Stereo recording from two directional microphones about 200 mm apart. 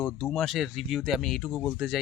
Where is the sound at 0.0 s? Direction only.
5° left (ahead or behind).